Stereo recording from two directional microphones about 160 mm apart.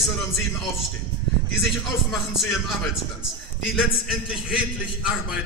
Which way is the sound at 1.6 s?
Centre (ahead or behind).